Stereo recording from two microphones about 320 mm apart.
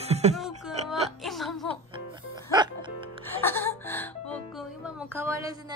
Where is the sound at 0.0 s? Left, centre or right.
Centre.